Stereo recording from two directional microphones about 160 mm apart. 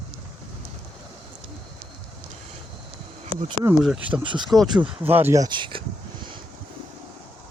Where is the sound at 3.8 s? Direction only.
5° right (ahead or behind).